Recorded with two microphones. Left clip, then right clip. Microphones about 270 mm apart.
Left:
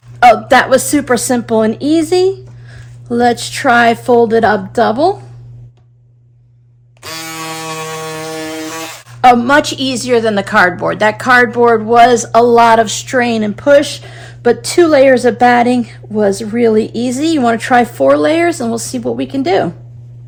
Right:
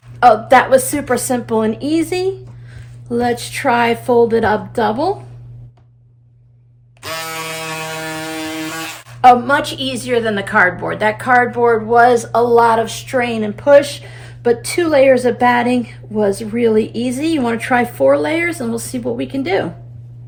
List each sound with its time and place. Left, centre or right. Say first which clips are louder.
0.2 s speech: left 2 dB; left
7.0 s a sound: even; centre
9.2 s a woman's voice: left 2 dB; left